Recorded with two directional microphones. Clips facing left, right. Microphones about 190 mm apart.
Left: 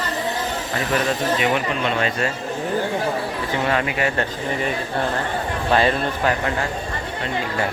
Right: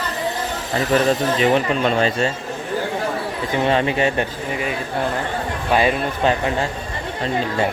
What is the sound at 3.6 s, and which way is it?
Speech, 25° right (ahead or behind).